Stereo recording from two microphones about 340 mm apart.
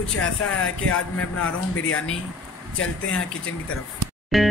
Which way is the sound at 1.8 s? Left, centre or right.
Left.